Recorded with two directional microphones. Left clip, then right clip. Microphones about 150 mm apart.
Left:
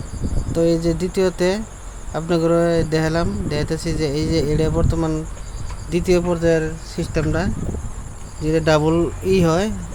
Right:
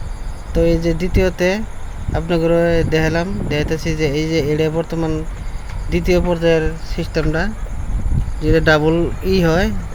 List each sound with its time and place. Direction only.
0.5 s speech: centre (ahead or behind)
8.4 s speech: 10° right (ahead or behind)